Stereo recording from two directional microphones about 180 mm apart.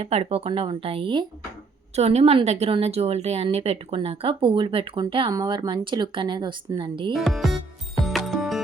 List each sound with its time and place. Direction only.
0.0 s a woman's voice: 35° right (ahead or behind)
7.2 s speech: centre (ahead or behind)
8.0 s music: centre (ahead or behind)